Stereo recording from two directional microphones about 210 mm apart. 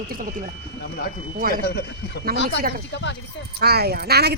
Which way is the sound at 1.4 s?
45° right (ahead or behind).